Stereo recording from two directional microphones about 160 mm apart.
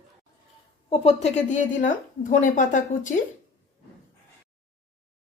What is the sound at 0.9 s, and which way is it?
A woman's voice, 40° left (ahead or behind).